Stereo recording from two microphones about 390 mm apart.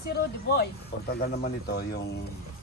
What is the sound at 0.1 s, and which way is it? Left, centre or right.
Speech, left.